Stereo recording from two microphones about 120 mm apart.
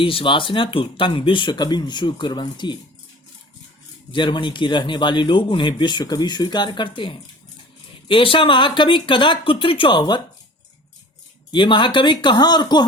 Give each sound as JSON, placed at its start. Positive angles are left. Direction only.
{"t": 0.0, "sound": "speech", "side_deg": 45}
{"t": 4.1, "sound": "speech", "side_deg": 40}
{"t": 11.5, "sound": "speech", "side_deg": 40}